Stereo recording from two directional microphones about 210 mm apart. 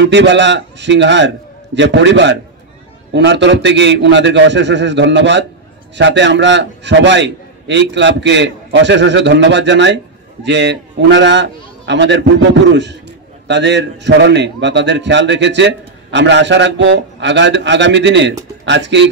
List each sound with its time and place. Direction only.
0.0 s a man's voice: 55° right (ahead or behind)